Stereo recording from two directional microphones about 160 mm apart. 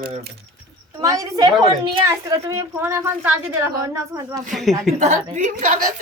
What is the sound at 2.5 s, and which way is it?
A woman's voice, 15° right (ahead or behind).